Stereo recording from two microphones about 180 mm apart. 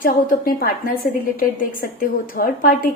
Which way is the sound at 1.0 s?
55° left (ahead or behind).